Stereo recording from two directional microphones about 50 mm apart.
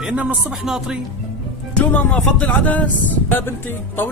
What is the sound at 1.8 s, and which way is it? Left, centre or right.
A man's voice, left.